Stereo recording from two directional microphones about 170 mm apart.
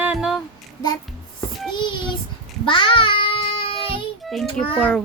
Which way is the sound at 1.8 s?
25° left (ahead or behind).